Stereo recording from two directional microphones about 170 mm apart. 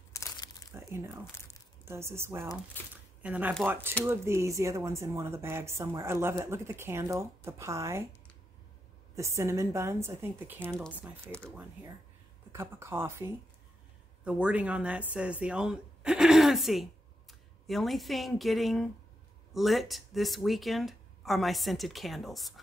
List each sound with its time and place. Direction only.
0.1 s crumpling: 20° left (ahead or behind)
0.7 s speech: 15° right (ahead or behind)
2.8 s speech: 10° left (ahead or behind)
3.2 s speech: 10° right (ahead or behind)
9.1 s speech: 15° right (ahead or behind); by 22.5 s centre (ahead or behind)